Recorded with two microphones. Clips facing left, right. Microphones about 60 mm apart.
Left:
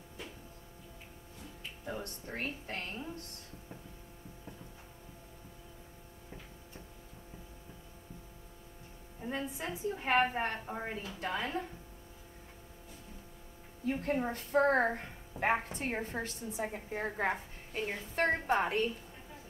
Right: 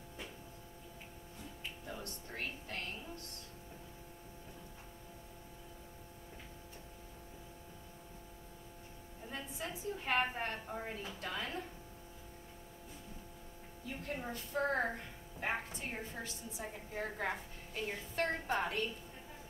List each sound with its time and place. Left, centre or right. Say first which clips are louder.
1.9 s music: left 8 dB; left
9.2 s a woman's voice: left 6 dB; left
13.8 s a woman's voice: left 10 dB; left